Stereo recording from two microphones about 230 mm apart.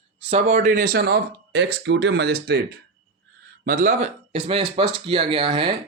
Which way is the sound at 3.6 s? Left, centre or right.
Right.